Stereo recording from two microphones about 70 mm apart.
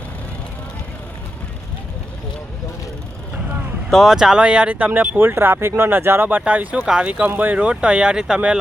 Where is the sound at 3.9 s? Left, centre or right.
Centre.